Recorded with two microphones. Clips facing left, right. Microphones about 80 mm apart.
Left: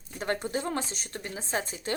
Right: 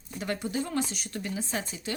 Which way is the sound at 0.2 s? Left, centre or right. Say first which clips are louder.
Left 1 dB; left.